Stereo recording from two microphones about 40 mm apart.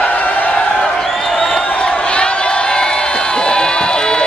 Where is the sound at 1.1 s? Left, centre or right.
Centre.